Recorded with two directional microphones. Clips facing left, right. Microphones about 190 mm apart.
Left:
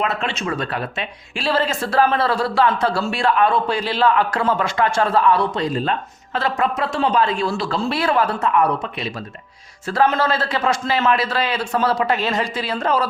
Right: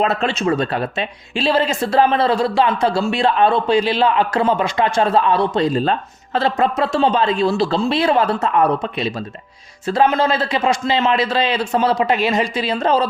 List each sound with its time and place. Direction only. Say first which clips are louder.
0.0 s speech: right 5 dB; 35° right (ahead or behind)